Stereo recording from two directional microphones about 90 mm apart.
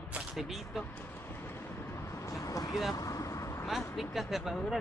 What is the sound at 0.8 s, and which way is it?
Vehicle, 20° left (ahead or behind).